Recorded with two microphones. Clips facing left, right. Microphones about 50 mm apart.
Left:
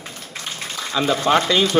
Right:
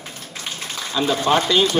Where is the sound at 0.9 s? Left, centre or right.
Left.